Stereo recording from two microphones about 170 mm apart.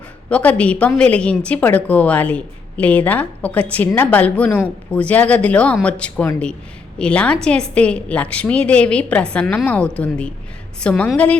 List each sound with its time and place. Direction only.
0.3 s a woman's voice: 5° left (ahead or behind)